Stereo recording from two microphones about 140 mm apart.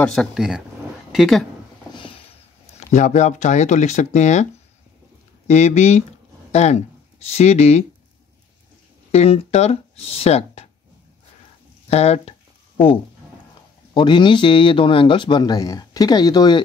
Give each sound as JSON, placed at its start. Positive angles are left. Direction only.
{"t": 0.0, "sound": "speech", "side_deg": 5}
{"t": 2.6, "sound": "speech", "side_deg": 55}
{"t": 5.5, "sound": "speech", "side_deg": 55}
{"t": 9.1, "sound": "speech", "side_deg": 50}
{"t": 11.9, "sound": "a sound", "side_deg": 50}
{"t": 13.9, "sound": "a man's voice", "side_deg": 35}